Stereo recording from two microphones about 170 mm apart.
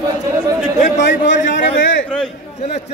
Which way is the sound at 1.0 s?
90° left.